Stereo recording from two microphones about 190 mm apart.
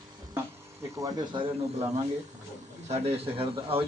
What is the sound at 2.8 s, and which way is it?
Speech, 35° right (ahead or behind).